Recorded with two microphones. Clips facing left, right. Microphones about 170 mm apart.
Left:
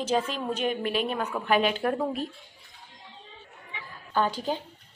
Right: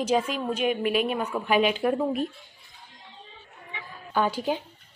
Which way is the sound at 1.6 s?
40° left (ahead or behind).